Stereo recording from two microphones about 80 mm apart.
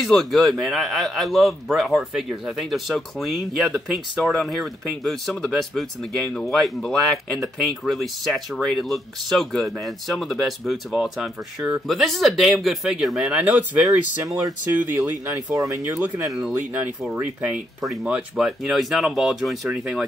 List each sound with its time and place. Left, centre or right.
0.0 s a man's voice: centre
14.2 s speech: right
16.3 s a man's voice: centre
17.1 s a man's voice: centre